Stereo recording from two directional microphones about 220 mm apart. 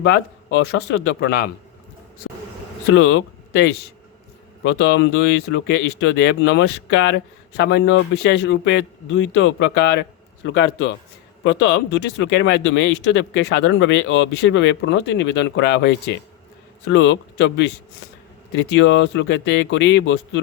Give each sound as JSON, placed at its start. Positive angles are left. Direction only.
{"t": 0.0, "sound": "speech", "side_deg": 50}
{"t": 2.9, "sound": "speech", "side_deg": 60}